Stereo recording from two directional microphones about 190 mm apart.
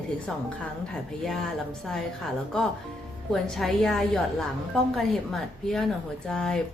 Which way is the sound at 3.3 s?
Centre (ahead or behind).